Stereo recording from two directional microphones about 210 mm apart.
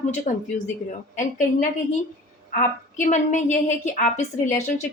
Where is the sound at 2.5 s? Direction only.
35° left (ahead or behind).